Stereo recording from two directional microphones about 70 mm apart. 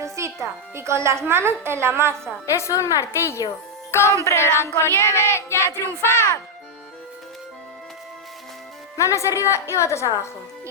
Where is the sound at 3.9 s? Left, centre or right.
Left.